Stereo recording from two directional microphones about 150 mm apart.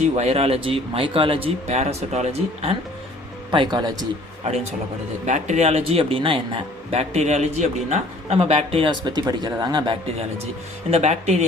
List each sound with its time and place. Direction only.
0.0 s speech: 45° right (ahead or behind)
3.5 s speech: 30° right (ahead or behind)
5.2 s speech: 55° right (ahead or behind)
10.9 s speech: 50° right (ahead or behind)